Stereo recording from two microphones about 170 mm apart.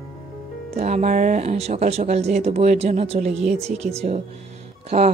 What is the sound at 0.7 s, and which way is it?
Speech, 40° right (ahead or behind).